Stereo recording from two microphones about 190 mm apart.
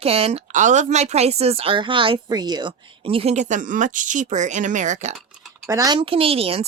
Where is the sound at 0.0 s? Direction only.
30° right (ahead or behind).